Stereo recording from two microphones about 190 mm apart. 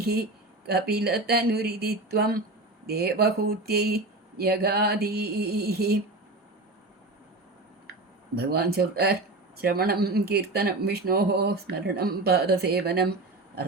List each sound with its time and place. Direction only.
0.0 s speech: 55° right (ahead or behind)
8.4 s speech: 55° right (ahead or behind)